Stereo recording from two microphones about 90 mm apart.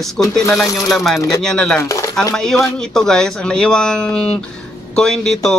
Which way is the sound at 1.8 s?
35° left (ahead or behind).